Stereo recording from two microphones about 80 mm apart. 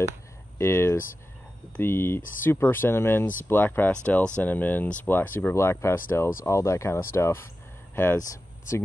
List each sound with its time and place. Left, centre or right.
0.6 s a sound: left
1.8 s speech: left
5.5 s speech: left